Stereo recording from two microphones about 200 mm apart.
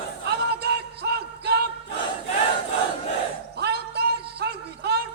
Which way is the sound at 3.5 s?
55° right (ahead or behind).